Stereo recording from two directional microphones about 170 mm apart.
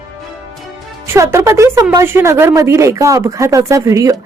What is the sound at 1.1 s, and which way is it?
Speech, 15° right (ahead or behind).